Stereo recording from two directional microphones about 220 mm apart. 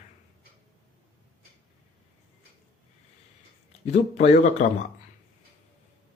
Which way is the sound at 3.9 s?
30° left (ahead or behind).